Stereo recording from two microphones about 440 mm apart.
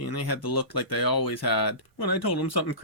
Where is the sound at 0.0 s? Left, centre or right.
Left.